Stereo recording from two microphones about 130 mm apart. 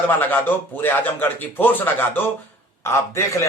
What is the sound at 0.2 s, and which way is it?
A man's voice, 15° left (ahead or behind).